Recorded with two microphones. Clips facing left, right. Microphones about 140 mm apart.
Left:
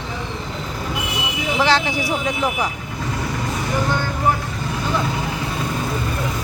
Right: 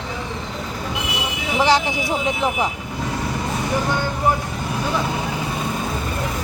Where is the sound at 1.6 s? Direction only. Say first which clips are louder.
Right 1 dB; 15° right (ahead or behind).